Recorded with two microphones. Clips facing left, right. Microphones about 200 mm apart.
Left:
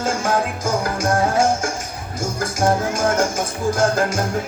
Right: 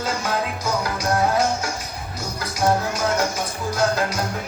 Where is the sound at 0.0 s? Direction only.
50° left (ahead or behind).